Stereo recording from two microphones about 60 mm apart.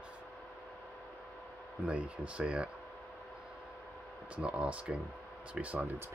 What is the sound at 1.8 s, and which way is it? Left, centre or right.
Speech, centre.